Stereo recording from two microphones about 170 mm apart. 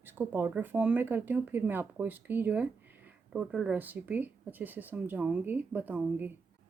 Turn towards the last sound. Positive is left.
turn(degrees=-10)  # may be behind; listen again after turning